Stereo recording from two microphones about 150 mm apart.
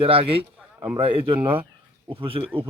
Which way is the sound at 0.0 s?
40° right (ahead or behind).